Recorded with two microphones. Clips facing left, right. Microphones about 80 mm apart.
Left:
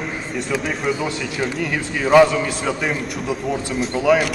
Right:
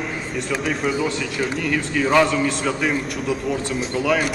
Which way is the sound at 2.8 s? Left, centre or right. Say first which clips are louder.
Right 1 dB; centre.